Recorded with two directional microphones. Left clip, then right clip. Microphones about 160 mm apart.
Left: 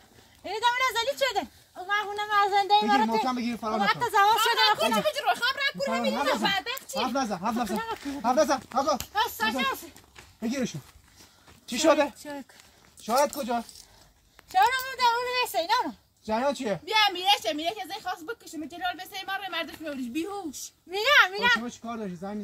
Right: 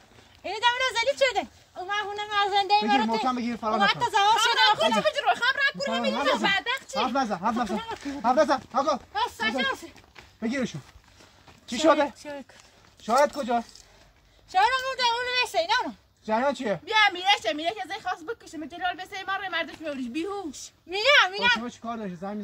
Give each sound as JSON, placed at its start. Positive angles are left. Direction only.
{"t": 0.5, "sound": "a woman's voice", "side_deg": -30}
{"t": 3.3, "sound": "speech", "side_deg": 10}
{"t": 4.0, "sound": "a child's voice", "side_deg": -40}
{"t": 4.4, "sound": "a woman's voice", "side_deg": 0}
{"t": 7.7, "sound": "speech", "side_deg": -20}
{"t": 8.2, "sound": "a woman's voice", "side_deg": 5}
{"t": 9.1, "sound": "speech", "side_deg": -25}
{"t": 10.4, "sound": "speech", "side_deg": 5}
{"t": 12.2, "sound": "a child's voice", "side_deg": -35}
{"t": 13.0, "sound": "speech", "side_deg": 10}
{"t": 14.6, "sound": "a woman's voice", "side_deg": -25}
{"t": 16.3, "sound": "a woman's voice", "side_deg": 5}
{"t": 20.9, "sound": "a child's voice", "side_deg": -40}
{"t": 21.6, "sound": "a woman's voice", "side_deg": 0}